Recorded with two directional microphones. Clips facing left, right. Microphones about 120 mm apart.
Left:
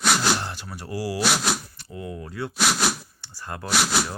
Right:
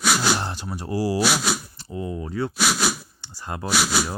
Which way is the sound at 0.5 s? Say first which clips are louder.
Right 5 dB; 20° right (ahead or behind).